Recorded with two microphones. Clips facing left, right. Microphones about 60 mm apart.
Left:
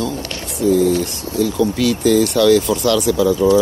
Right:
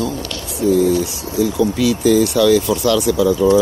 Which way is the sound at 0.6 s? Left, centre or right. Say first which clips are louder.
Even; right.